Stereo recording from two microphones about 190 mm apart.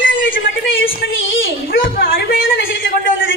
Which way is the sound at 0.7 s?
90° left.